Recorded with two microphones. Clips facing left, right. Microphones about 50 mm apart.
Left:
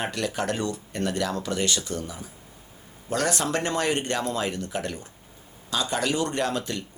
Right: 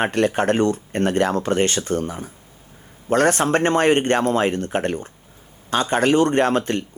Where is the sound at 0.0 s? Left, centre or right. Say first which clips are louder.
Right 9 dB; right.